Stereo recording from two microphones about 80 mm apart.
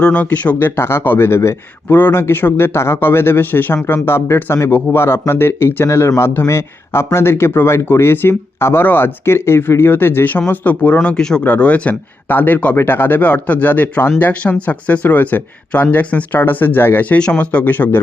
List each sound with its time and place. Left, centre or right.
0.0 s speech: centre
0.8 s speech: left